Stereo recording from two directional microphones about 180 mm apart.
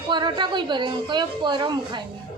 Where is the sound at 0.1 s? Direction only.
25° right (ahead or behind).